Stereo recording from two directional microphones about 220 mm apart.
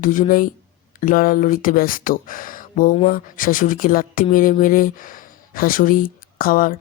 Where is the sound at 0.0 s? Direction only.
40° left (ahead or behind).